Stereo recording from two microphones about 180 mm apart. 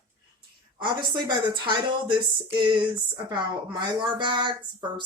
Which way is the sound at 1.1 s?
25° right (ahead or behind).